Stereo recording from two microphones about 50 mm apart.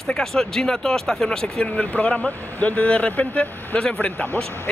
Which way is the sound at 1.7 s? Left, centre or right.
Left.